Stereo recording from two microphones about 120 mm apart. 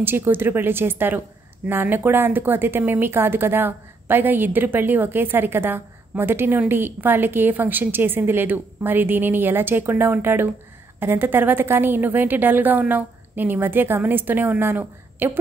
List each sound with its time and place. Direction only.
0.0 s speech: 15° right (ahead or behind)